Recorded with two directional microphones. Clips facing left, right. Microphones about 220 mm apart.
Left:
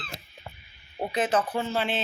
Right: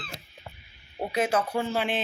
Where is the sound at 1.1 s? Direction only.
10° right (ahead or behind).